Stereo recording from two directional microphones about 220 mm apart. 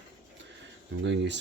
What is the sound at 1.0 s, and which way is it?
Speech, 55° right (ahead or behind).